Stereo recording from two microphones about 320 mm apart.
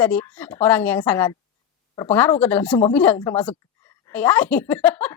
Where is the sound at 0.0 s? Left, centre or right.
Centre.